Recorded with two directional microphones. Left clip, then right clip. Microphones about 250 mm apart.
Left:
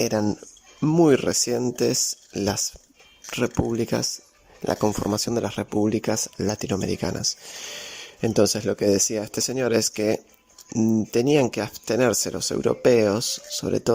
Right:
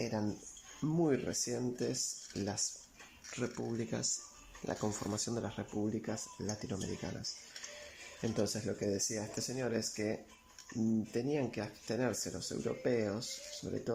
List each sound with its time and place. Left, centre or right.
0.0 s speech: left